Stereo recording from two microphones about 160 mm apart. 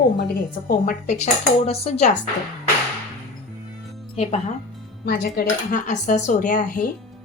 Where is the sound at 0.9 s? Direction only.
50° left (ahead or behind).